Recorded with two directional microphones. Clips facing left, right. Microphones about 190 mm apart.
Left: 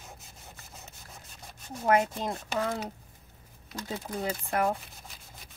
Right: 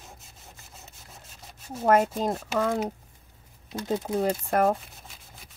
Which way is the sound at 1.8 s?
40° right (ahead or behind).